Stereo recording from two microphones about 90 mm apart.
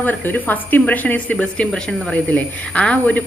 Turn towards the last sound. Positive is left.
turn(degrees=15)  # may be behind; listen again after turning